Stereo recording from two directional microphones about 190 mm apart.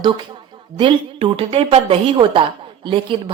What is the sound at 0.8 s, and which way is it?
A woman's voice, 25° right (ahead or behind).